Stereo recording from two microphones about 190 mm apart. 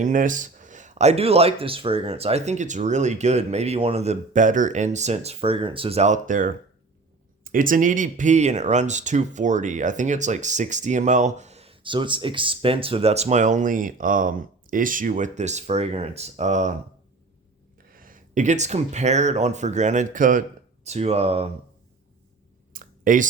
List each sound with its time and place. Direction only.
0.0 s speech: 45° right (ahead or behind)
17.9 s speech: 45° right (ahead or behind)
22.7 s clicking: 45° right (ahead or behind)